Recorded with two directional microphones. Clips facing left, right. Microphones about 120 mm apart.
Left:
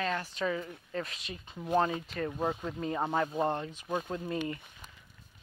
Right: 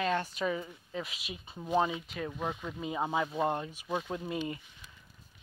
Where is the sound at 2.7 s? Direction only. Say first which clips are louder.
Left 1 dB; 5° right (ahead or behind).